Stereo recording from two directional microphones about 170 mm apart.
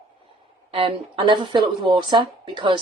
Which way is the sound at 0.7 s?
30° right (ahead or behind).